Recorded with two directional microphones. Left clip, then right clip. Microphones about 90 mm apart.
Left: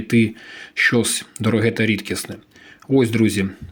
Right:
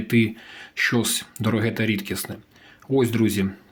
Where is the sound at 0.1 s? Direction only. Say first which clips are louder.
Left 3 dB; 35° left (ahead or behind).